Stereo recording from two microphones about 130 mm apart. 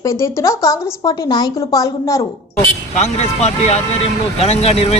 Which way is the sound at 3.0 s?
55° left (ahead or behind).